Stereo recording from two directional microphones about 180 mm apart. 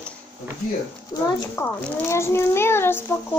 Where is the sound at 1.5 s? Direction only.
15° left (ahead or behind).